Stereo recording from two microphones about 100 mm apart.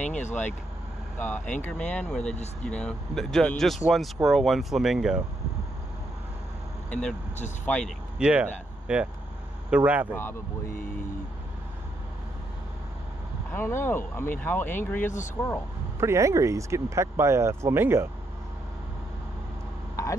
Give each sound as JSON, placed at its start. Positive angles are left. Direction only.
{"t": 0.0, "sound": "speech", "side_deg": 15}
{"t": 6.9, "sound": "speech", "side_deg": 10}
{"t": 8.2, "sound": "speech", "side_deg": -10}
{"t": 10.1, "sound": "speech", "side_deg": 25}
{"t": 13.5, "sound": "speech", "side_deg": 20}
{"t": 16.0, "sound": "speech", "side_deg": -30}